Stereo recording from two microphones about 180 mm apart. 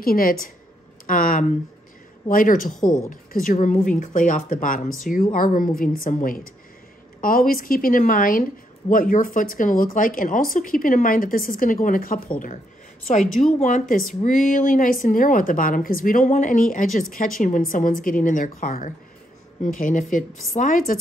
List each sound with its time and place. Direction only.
0.0 s speech: 55° left (ahead or behind)
13.4 s speech: 40° left (ahead or behind)